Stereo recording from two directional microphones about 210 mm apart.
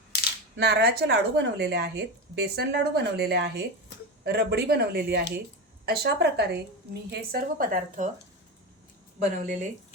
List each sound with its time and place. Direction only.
0.5 s speech: 50° right (ahead or behind)
9.1 s speech: 35° right (ahead or behind)